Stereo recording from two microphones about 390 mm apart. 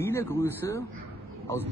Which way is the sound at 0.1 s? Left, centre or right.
Centre.